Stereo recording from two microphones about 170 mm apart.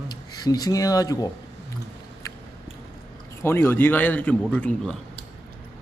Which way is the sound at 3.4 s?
15° left (ahead or behind).